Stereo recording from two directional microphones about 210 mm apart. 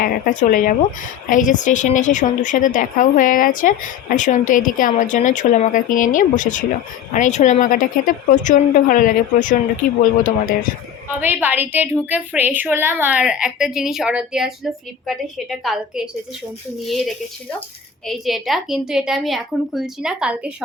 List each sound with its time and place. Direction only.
0.0 s a woman's voice: 40° left (ahead or behind)
11.1 s a woman's voice: 10° right (ahead or behind)
18.0 s a woman's voice: centre (ahead or behind)